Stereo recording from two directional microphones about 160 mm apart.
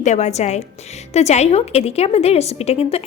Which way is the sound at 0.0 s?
45° left (ahead or behind).